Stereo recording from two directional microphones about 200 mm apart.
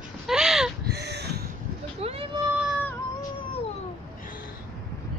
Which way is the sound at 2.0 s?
30° right (ahead or behind).